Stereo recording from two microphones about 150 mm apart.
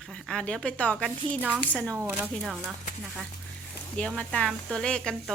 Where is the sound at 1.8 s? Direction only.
20° right (ahead or behind).